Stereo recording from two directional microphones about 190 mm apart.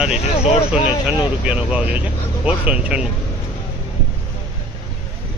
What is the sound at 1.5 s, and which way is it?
Speech, 5° right (ahead or behind).